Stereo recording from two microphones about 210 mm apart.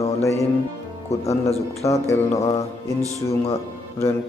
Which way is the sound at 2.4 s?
15° left (ahead or behind).